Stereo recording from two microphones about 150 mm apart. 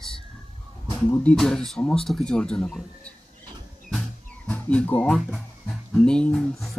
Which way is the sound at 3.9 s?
Centre (ahead or behind).